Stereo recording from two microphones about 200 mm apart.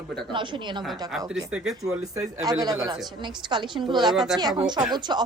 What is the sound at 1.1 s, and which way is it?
Speech, centre (ahead or behind).